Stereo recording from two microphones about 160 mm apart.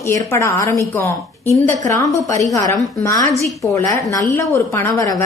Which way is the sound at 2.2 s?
20° left (ahead or behind).